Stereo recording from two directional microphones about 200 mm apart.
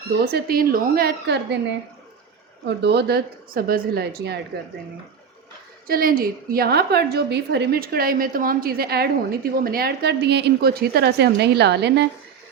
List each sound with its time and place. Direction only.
0.1 s a woman's voice: 50° right (ahead or behind)
2.6 s a woman's voice: 55° right (ahead or behind)
5.9 s a woman's voice: 45° right (ahead or behind)